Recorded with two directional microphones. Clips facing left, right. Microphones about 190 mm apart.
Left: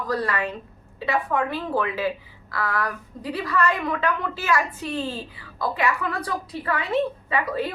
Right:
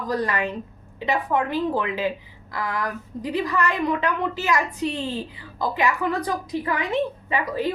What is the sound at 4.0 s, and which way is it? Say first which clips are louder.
A woman's voice: right 1 dB; 15° right (ahead or behind).